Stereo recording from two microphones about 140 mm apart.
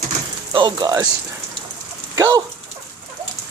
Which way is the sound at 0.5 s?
35° right (ahead or behind).